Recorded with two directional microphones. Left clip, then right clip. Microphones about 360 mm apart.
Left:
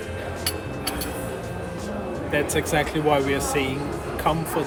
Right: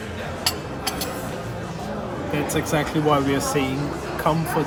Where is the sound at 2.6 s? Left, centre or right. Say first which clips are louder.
Even; centre.